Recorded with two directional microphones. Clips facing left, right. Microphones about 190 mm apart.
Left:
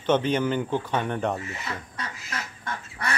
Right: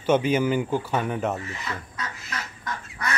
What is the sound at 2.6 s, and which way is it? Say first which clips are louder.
Goose: right 2 dB; 30° left (ahead or behind).